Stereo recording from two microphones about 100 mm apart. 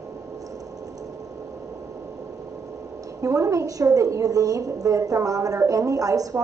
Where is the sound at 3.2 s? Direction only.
35° right (ahead or behind).